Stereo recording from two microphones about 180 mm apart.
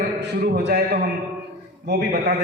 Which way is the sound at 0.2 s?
70° right (ahead or behind).